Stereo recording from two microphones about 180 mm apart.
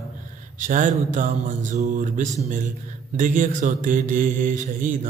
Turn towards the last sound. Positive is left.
turn(degrees=-45)  # may be behind; listen again after turning